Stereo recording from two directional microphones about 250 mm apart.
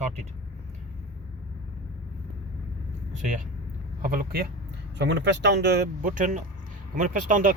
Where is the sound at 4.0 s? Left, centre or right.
Right.